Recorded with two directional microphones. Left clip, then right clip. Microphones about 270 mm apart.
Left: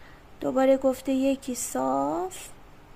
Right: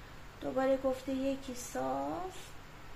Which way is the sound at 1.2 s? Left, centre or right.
Left.